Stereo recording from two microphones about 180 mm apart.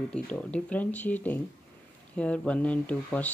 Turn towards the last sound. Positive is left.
turn(degrees=10)  # may be behind; listen again after turning